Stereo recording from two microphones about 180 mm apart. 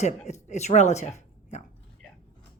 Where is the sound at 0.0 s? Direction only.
40° left (ahead or behind).